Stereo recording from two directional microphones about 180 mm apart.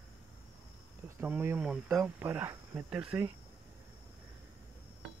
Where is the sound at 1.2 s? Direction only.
15° right (ahead or behind).